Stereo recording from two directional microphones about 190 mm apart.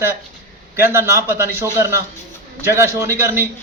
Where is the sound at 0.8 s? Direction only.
15° right (ahead or behind).